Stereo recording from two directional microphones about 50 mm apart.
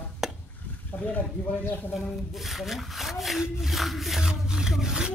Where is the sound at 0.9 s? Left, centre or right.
Left.